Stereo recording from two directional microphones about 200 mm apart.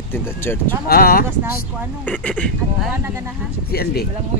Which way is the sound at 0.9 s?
50° left (ahead or behind).